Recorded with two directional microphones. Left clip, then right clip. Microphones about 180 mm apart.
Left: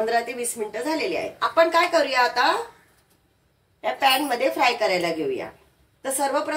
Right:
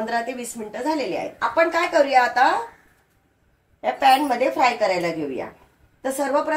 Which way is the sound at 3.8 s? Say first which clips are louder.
Right 4 dB; 55° right (ahead or behind).